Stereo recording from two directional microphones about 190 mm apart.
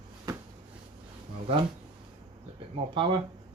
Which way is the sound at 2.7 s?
25° right (ahead or behind).